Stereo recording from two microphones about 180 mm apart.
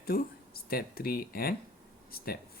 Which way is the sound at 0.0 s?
55° left (ahead or behind).